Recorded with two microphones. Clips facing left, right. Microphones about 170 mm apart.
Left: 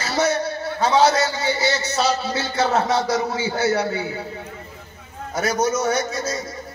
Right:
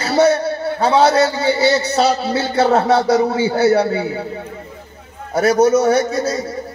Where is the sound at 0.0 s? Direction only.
30° right (ahead or behind).